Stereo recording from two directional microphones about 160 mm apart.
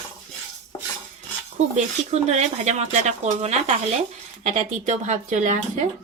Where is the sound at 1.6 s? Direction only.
45° right (ahead or behind).